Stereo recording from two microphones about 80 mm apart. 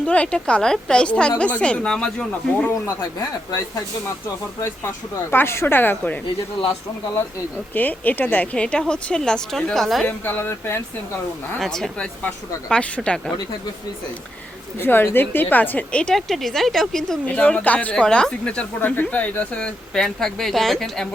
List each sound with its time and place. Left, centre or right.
0.0 s speech: centre
2.8 s speech: left
5.3 s a woman's voice: left
7.7 s speech: left; by 10.1 s centre
10.1 s a woman's voice: left
11.6 s speech: centre
14.8 s a woman's voice: left
16.1 s speech: centre